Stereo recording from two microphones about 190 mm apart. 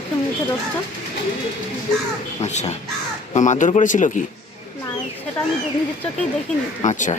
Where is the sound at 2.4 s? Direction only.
35° left (ahead or behind).